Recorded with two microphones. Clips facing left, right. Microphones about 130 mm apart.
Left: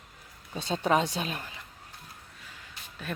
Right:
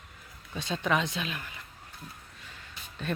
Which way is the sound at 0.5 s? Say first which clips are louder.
Left 3 dB; 40° left (ahead or behind).